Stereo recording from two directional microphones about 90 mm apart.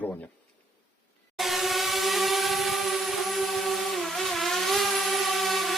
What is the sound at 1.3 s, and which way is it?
Vehicle, centre (ahead or behind).